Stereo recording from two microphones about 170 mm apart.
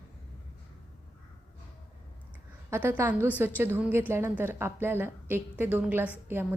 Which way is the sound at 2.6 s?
10° right (ahead or behind).